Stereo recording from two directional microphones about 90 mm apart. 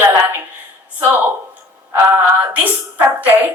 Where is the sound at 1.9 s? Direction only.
20° right (ahead or behind).